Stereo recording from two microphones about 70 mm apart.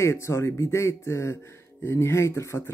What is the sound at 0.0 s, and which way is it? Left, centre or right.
Speech, left.